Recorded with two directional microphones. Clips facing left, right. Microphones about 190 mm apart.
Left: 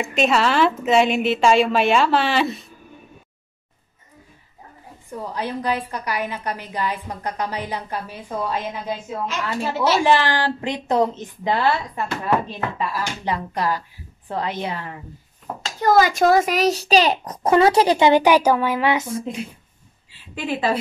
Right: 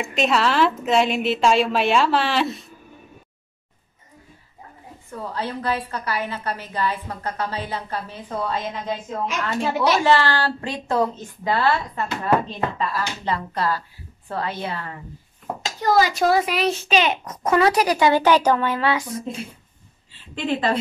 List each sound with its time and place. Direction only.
0.0 s a woman's voice: centre (ahead or behind)
5.1 s a woman's voice: 15° left (ahead or behind)
15.8 s a child's voice: 50° left (ahead or behind); by 19.3 s 25° left (ahead or behind)
20.3 s a woman's voice: 10° left (ahead or behind)